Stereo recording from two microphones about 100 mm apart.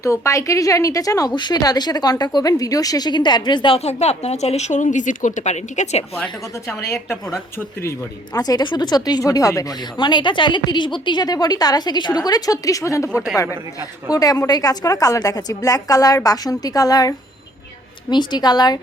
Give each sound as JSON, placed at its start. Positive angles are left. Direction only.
{"t": 0.0, "sound": "a woman's voice", "side_deg": 30}
{"t": 3.8, "sound": "speech", "side_deg": 90}
{"t": 6.7, "sound": "speech", "side_deg": 25}
{"t": 7.9, "sound": "a woman's voice", "side_deg": 40}
{"t": 10.0, "sound": "a woman's voice", "side_deg": 50}